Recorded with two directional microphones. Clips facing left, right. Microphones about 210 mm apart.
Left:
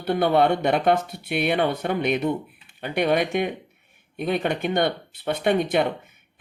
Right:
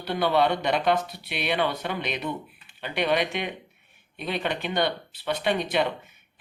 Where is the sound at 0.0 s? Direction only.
50° left (ahead or behind).